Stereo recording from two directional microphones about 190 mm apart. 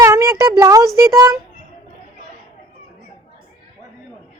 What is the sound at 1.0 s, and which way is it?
Speech, 15° right (ahead or behind).